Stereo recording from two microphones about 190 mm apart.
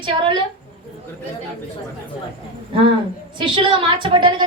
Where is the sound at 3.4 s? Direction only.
25° right (ahead or behind).